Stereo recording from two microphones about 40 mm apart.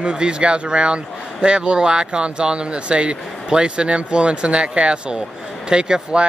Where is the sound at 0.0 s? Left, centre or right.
Right.